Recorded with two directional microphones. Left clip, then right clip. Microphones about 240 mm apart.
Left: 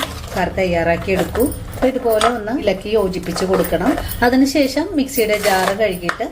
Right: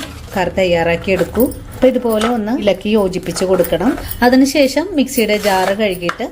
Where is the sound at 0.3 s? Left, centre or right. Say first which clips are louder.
Right 4 dB; right.